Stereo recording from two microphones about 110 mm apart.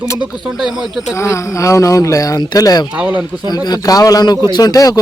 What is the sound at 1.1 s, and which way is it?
Speech, 25° left (ahead or behind).